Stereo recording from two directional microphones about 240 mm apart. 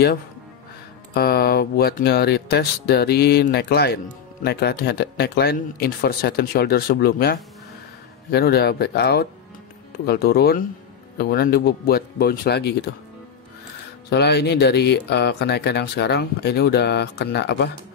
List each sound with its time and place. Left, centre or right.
1.1 s speech: left
14.1 s speech: left